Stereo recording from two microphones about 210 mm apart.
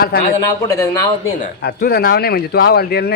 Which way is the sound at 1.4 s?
45° left (ahead or behind).